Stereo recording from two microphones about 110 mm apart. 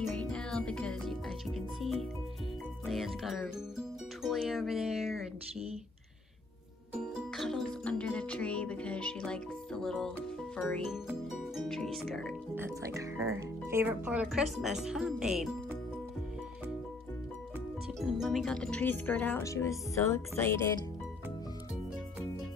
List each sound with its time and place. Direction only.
0.1 s music: 10° left (ahead or behind)
4.2 s speech: centre (ahead or behind)
6.9 s music: centre (ahead or behind)
11.1 s speech: centre (ahead or behind)
12.5 s speech: 25° right (ahead or behind); by 15.5 s 5° right (ahead or behind)
18.0 s speech: 5° right (ahead or behind); by 19.4 s 15° left (ahead or behind)
19.4 s music: 30° left (ahead or behind)